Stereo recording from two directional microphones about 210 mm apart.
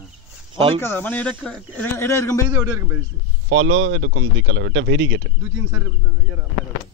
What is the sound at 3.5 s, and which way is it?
Speech, 70° right (ahead or behind).